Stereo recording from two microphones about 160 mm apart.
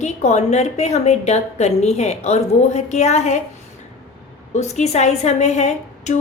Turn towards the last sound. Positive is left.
turn(degrees=45)  # may be behind; listen again after turning